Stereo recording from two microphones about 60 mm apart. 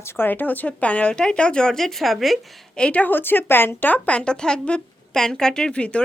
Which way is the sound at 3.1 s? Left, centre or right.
Left.